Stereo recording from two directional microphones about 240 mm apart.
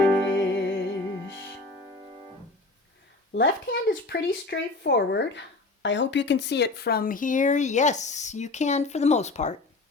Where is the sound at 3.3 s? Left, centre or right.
Left.